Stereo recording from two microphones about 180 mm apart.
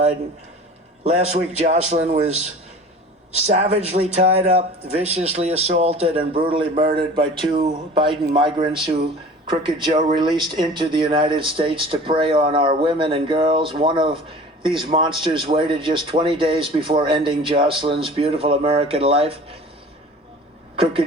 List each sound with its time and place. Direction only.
1.0 s a man's voice: 35° right (ahead or behind)
9.9 s speech: 45° right (ahead or behind)
10.2 s a man's voice: 25° right (ahead or behind)